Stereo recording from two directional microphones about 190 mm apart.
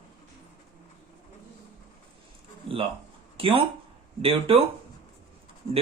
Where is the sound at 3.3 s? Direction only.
30° right (ahead or behind).